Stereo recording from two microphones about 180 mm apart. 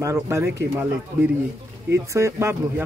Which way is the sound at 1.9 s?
15° right (ahead or behind).